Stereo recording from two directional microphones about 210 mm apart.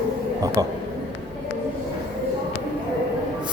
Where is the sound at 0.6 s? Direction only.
15° right (ahead or behind).